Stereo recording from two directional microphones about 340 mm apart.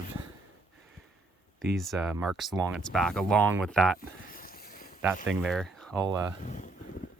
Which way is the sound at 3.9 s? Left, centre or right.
Left.